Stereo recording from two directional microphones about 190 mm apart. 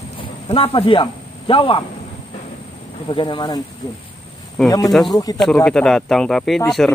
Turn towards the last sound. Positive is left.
turn(degrees=5)  # may be behind; listen again after turning